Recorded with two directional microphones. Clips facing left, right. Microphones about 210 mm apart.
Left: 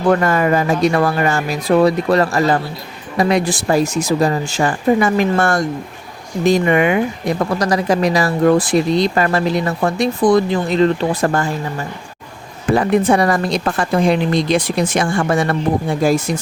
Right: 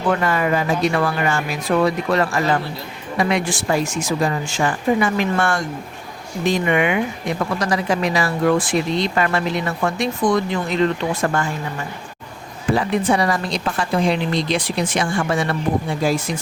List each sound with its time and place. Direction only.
0.1 s speech: 45° left (ahead or behind)
12.7 s a woman's voice: 50° left (ahead or behind)